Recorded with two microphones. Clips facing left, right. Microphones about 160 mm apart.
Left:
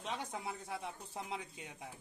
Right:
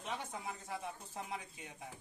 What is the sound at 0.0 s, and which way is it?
Speech, 15° left (ahead or behind).